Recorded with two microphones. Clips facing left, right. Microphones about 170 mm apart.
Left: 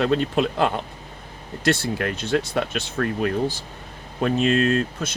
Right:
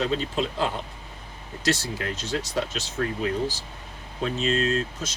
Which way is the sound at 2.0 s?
60° left (ahead or behind).